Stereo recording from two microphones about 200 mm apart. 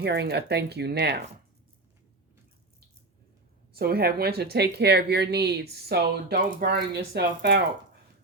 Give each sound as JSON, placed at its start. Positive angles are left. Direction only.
{"t": 0.0, "sound": "speech", "side_deg": -55}
{"t": 3.7, "sound": "speech", "side_deg": -50}